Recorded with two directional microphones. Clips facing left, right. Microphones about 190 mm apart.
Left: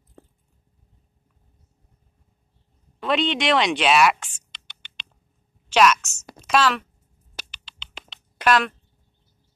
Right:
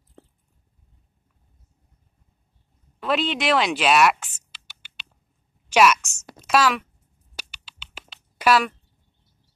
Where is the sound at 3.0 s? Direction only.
Centre (ahead or behind).